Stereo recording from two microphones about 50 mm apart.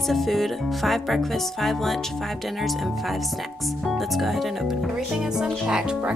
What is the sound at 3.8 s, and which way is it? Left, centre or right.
Speech, centre.